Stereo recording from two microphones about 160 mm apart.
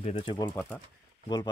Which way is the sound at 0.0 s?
35° left (ahead or behind).